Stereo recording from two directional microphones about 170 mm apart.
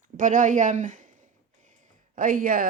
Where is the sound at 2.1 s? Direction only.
55° right (ahead or behind).